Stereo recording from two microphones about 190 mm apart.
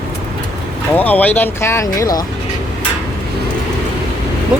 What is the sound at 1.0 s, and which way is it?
Speech, 10° left (ahead or behind).